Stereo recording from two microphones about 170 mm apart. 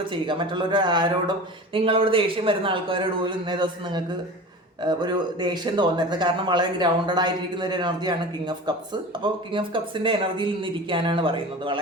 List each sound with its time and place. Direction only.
0.1 s speech: 30° right (ahead or behind)